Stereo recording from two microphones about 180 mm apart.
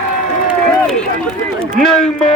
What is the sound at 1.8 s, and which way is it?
Speech, centre (ahead or behind).